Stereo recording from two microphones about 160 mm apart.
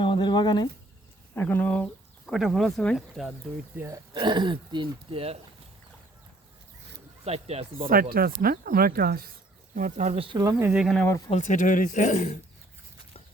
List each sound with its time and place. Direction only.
0.0 s speech: 30° left (ahead or behind)
1.4 s speech: 10° left (ahead or behind)
2.2 s speech: centre (ahead or behind)
3.8 s speech: 20° right (ahead or behind)
4.2 s speech: 30° right (ahead or behind)
7.3 s speech: 40° right (ahead or behind)
8.4 s speech: 65° right (ahead or behind)
9.7 s speech: 50° right (ahead or behind)
10.2 s speech: 25° right (ahead or behind)
10.7 s speech: 5° right (ahead or behind)
10.9 s speech: 10° left (ahead or behind)
11.3 s speech: 50° left (ahead or behind)